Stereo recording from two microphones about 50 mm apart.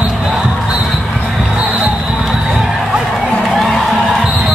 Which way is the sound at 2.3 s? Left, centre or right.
Centre.